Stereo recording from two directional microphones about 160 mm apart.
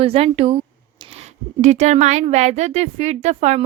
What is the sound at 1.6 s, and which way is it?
A woman's voice, 45° right (ahead or behind).